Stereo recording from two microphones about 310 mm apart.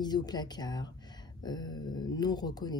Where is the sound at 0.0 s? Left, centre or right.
Centre.